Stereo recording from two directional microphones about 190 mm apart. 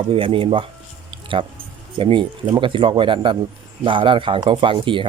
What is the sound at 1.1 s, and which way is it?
Music, 25° right (ahead or behind).